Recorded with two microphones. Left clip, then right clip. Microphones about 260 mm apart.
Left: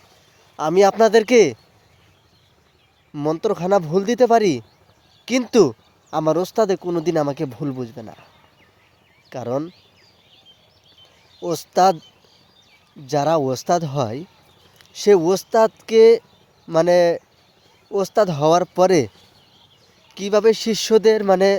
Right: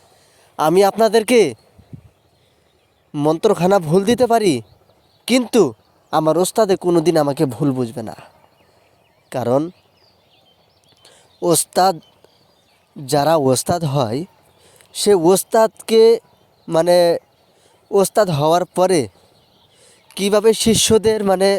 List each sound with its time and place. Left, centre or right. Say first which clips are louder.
0.5 s speech: right 2 dB; right
3.1 s speech: right 5 dB; right
9.3 s speech: right 7 dB; right
11.0 s a sound: right 8 dB; right
13.1 s speech: right 4 dB; right